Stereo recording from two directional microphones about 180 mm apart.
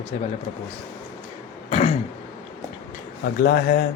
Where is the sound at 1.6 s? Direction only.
35° left (ahead or behind).